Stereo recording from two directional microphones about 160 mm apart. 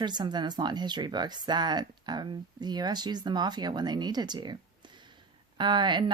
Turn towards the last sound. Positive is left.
turn(degrees=-30)  # may be behind; listen again after turning